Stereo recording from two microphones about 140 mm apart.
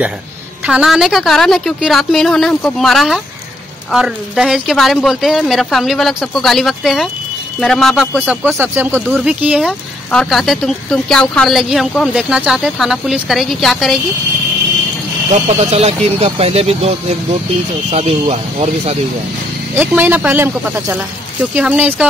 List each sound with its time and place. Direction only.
0.7 s a man's voice: 5° right (ahead or behind)
15.4 s speech: 50° right (ahead or behind)
19.8 s speech: 15° right (ahead or behind)